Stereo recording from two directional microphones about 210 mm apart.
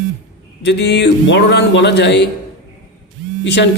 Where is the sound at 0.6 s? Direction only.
55° left (ahead or behind).